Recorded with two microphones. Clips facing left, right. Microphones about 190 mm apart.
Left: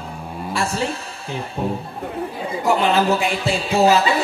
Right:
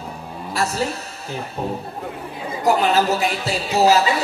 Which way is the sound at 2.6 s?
40° right (ahead or behind).